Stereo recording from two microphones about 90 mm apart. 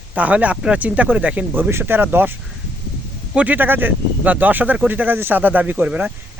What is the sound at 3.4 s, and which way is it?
Speech, 20° right (ahead or behind).